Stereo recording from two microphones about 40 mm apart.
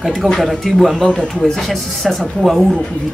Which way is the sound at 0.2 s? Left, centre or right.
Right.